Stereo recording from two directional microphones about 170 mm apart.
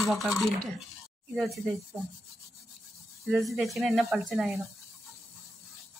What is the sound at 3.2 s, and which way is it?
Speech, centre (ahead or behind).